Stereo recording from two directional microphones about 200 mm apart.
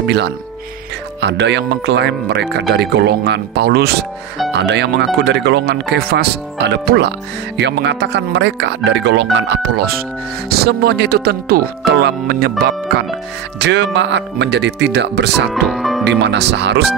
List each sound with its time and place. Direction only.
0.0 s speech: 60° right (ahead or behind)
15.5 s music: centre (ahead or behind)
16.0 s speech: 60° right (ahead or behind)